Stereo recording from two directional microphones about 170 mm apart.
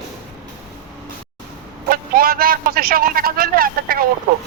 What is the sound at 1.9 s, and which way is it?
Speech, 60° right (ahead or behind).